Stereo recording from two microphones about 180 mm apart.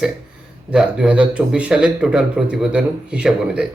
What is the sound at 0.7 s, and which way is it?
A man's voice, 5° right (ahead or behind).